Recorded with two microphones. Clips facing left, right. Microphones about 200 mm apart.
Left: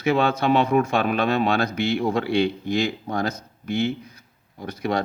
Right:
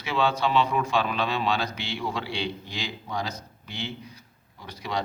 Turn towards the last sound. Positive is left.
turn(degrees=50)  # may be behind; listen again after turning